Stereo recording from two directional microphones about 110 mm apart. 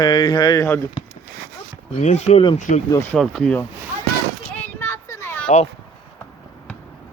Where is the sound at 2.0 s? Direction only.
90° left.